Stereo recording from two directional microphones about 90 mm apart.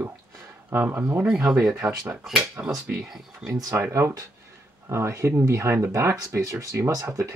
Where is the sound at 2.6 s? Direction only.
20° right (ahead or behind).